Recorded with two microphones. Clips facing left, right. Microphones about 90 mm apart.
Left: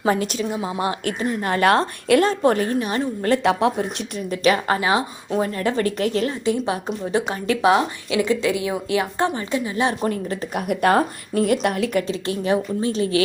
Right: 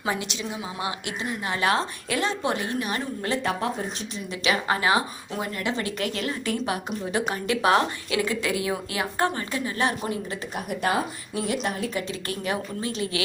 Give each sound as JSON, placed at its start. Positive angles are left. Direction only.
{"t": 0.0, "sound": "a woman's voice", "side_deg": 45}
{"t": 3.4, "sound": "speech", "side_deg": 90}
{"t": 4.3, "sound": "a woman's voice", "side_deg": 40}
{"t": 4.8, "sound": "speech", "side_deg": 25}
{"t": 5.4, "sound": "a woman's voice", "side_deg": 40}
{"t": 10.0, "sound": "speech", "side_deg": 55}
{"t": 12.0, "sound": "a woman's voice", "side_deg": 30}